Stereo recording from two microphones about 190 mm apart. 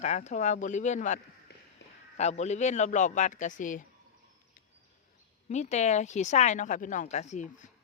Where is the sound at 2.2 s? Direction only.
35° left (ahead or behind).